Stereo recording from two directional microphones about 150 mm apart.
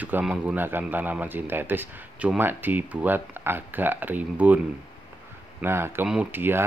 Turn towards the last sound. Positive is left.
turn(degrees=-15)  # may be behind; listen again after turning